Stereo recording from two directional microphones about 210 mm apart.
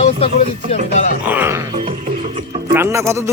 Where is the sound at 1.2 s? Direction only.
10° right (ahead or behind).